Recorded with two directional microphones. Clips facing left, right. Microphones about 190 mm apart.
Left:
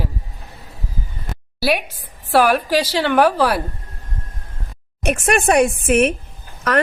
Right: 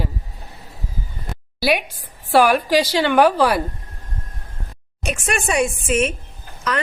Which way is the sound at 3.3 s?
5° left (ahead or behind).